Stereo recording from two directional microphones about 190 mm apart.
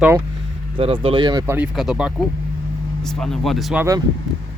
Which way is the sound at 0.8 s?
30° right (ahead or behind).